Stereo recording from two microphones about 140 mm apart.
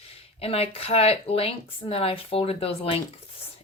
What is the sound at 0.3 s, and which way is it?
Speech, 45° left (ahead or behind).